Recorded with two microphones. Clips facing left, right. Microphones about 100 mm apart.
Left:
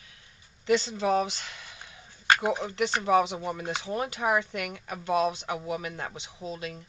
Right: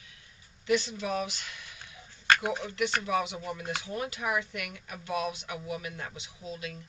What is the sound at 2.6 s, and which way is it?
Speech, 35° left (ahead or behind).